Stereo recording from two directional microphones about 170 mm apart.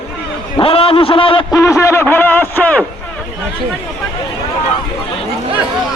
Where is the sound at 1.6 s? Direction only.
15° left (ahead or behind).